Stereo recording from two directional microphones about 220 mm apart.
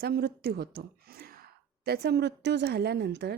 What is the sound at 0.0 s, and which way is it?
Speech, 45° right (ahead or behind).